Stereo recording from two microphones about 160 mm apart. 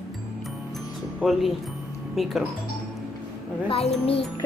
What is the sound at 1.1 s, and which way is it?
Speech, centre (ahead or behind).